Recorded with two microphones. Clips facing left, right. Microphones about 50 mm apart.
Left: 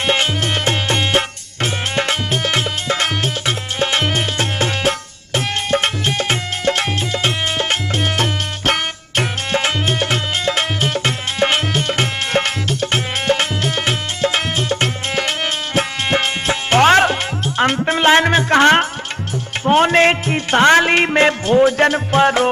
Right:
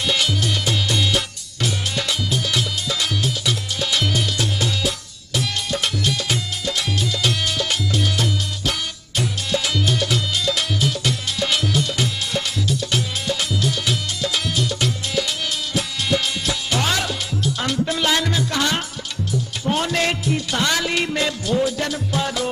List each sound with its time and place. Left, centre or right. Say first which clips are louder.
0.0 s music: left 4 dB; left